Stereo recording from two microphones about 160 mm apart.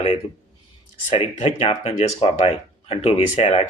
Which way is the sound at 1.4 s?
40° left (ahead or behind).